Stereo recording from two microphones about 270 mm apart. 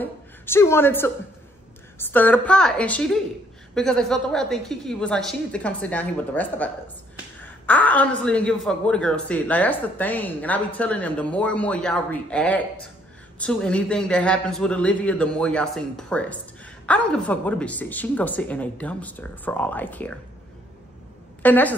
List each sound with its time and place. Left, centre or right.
0.0 s a woman's voice: centre
21.4 s a woman's voice: centre